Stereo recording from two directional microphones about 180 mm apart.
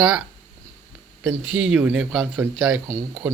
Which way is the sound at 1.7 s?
5° right (ahead or behind).